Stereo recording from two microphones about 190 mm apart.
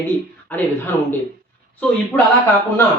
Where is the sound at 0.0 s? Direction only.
10° left (ahead or behind).